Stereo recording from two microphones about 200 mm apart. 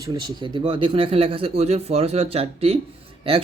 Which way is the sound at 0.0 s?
20° right (ahead or behind).